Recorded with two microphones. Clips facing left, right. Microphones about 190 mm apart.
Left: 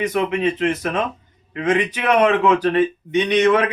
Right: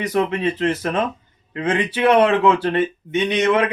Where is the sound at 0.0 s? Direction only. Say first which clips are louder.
Even; 35° right (ahead or behind).